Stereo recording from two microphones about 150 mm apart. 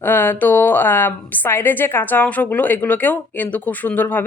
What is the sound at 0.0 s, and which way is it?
Speech, 15° left (ahead or behind).